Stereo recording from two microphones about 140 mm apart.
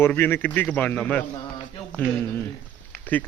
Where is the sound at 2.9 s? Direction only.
10° left (ahead or behind).